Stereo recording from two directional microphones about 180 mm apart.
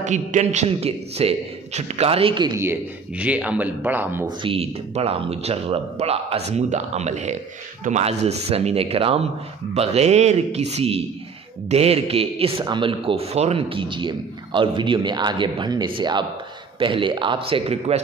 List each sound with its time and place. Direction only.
0.0 s speech: 40° right (ahead or behind); by 2.6 s 25° right (ahead or behind)
2.6 s speech: 10° right (ahead or behind)
4.4 s speech: 30° right (ahead or behind)